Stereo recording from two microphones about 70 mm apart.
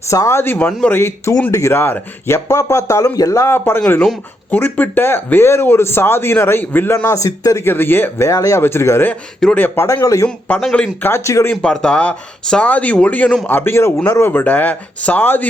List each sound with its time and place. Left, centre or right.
0.3 s speech: left
3.5 s speech: left
7.6 s speech: left
8.3 s speech: left
8.6 s speech: left
9.8 s speech: left
10.5 s speech: left
11.1 s speech: left
11.6 s speech: centre
13.5 s speech: left